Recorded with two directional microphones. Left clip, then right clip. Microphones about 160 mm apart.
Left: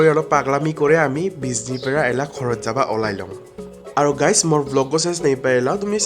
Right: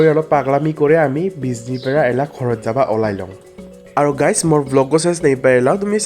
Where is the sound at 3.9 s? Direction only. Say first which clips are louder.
Right 1 dB; 30° right (ahead or behind).